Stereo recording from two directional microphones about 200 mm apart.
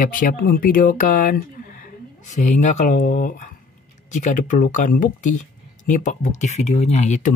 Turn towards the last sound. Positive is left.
turn(degrees=35)  # may be behind; listen again after turning